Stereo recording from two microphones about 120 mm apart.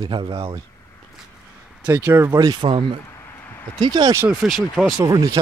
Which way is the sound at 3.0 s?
20° left (ahead or behind).